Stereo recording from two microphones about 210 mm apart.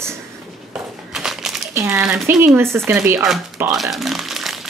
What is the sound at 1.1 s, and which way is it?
Crumpling, centre (ahead or behind).